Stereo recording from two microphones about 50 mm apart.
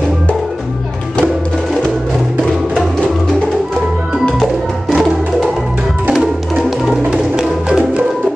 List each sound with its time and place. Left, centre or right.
4.9 s music: centre
7.1 s music: centre